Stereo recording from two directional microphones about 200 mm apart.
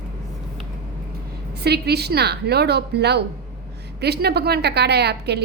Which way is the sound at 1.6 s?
55° right (ahead or behind).